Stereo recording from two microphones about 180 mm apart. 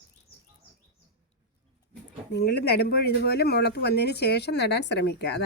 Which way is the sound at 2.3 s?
65° left (ahead or behind).